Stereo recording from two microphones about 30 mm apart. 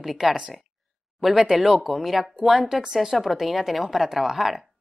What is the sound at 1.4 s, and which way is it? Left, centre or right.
Speech, right.